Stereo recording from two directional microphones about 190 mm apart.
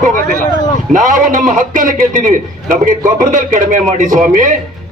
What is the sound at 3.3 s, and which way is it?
Speech, 40° right (ahead or behind).